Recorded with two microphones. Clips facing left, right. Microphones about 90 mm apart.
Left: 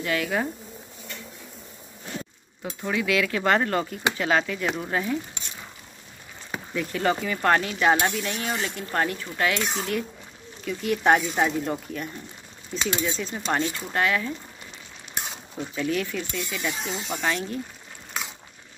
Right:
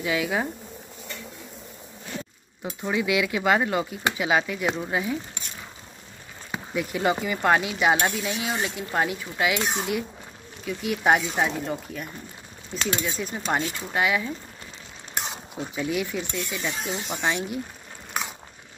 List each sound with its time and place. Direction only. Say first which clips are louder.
0.0 s speech: even; 5° right (ahead or behind)
2.6 s speech: right 1 dB; 15° right (ahead or behind)
6.5 s speech: right 1 dB; 10° right (ahead or behind)
13.2 s speech: even; 10° right (ahead or behind)
15.5 s speech: left 1 dB; 10° right (ahead or behind)
16.8 s speech: right 2 dB; 5° right (ahead or behind)